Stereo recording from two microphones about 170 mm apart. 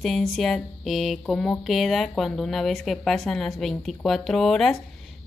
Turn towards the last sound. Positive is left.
turn(degrees=0)  # may be behind; listen again after turning